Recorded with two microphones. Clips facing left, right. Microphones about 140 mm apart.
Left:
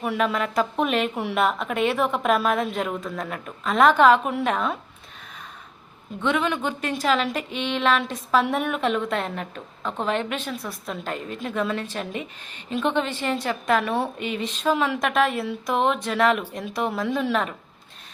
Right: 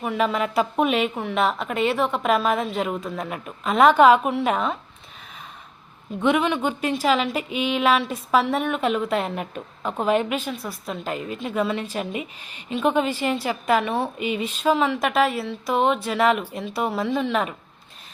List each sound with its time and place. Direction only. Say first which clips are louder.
0.0 s a woman's voice: right 1 dB; centre (ahead or behind)
6.2 s a woman's voice: right 3 dB; 10° right (ahead or behind)